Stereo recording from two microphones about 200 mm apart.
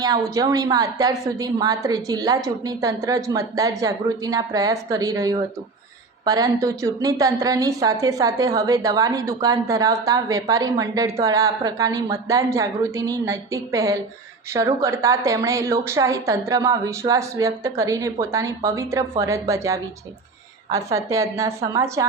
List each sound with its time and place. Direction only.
0.0 s a woman's voice: 20° right (ahead or behind)